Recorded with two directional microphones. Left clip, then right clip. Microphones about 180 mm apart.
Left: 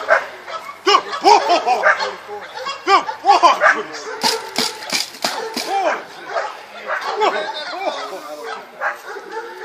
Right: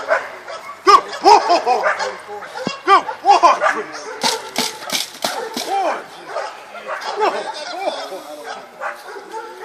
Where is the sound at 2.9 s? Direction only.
15° left (ahead or behind).